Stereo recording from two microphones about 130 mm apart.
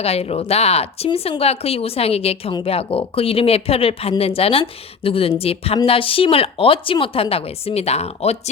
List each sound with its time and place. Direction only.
0.0 s speech: 50° left (ahead or behind)